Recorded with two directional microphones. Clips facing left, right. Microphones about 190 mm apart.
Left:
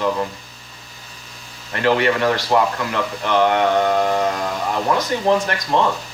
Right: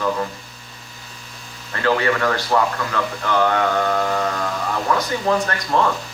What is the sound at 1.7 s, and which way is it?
Speech, 20° left (ahead or behind).